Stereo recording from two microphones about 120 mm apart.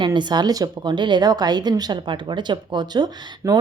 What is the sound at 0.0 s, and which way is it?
Speech, 40° right (ahead or behind).